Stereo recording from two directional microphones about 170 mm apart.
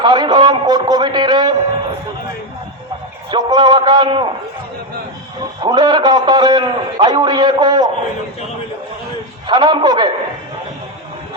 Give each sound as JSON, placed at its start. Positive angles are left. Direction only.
{"t": 0.0, "sound": "a man's voice", "side_deg": -25}
{"t": 3.3, "sound": "a man's voice", "side_deg": -25}
{"t": 5.6, "sound": "a man's voice", "side_deg": -25}
{"t": 9.5, "sound": "a man's voice", "side_deg": -25}